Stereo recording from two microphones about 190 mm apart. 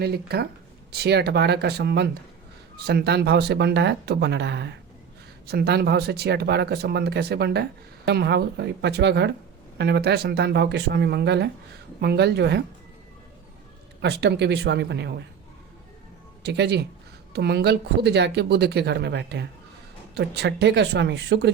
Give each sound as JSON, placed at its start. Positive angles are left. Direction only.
{"t": 0.0, "sound": "speech", "side_deg": -55}
{"t": 14.0, "sound": "speech", "side_deg": -65}
{"t": 16.4, "sound": "speech", "side_deg": -60}